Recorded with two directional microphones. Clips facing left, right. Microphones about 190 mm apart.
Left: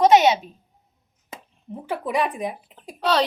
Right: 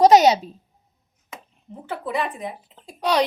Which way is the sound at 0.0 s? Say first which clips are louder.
Right 2 dB; 35° right (ahead or behind).